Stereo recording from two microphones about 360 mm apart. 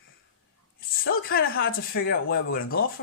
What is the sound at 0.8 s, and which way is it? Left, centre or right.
Speech, left.